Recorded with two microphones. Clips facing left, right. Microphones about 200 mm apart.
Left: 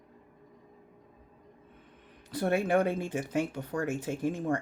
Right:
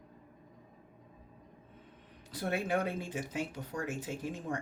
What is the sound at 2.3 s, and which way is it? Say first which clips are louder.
Speech: left 6 dB; 55° left (ahead or behind).